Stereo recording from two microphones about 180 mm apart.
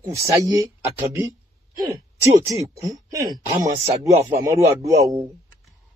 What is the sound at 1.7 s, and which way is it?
Speech, 20° right (ahead or behind).